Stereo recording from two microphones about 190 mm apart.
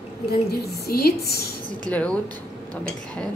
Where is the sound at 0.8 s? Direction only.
55° left (ahead or behind).